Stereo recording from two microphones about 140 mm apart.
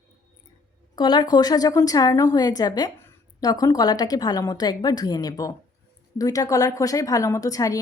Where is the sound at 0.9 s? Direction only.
30° left (ahead or behind).